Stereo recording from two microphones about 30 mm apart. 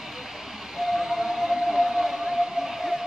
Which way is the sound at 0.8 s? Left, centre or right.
Centre.